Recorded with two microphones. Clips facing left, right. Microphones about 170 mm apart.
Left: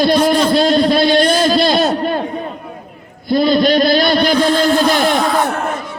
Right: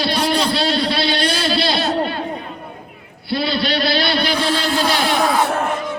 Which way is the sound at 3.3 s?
45° left (ahead or behind).